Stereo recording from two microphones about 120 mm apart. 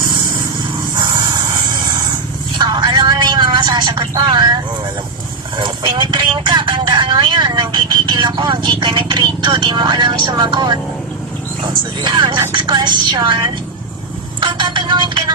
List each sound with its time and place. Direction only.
0.9 s vehicle: 35° right (ahead or behind)
12.0 s a woman's voice: 40° right (ahead or behind)
14.4 s music: 40° right (ahead or behind)